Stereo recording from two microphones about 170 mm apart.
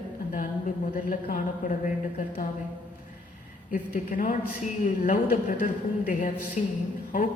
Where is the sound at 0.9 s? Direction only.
50° left (ahead or behind).